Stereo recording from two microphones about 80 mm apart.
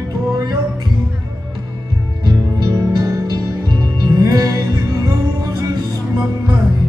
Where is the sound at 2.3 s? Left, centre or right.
Right.